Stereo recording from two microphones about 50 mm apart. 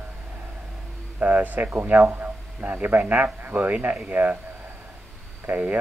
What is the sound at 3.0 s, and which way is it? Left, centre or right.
Speech, right.